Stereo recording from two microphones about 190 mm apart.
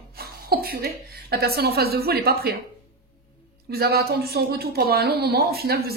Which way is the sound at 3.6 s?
55° right (ahead or behind).